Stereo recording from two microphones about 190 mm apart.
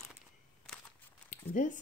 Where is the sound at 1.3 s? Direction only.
40° left (ahead or behind).